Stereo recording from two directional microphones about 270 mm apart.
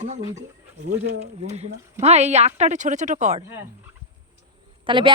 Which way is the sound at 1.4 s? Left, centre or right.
Right.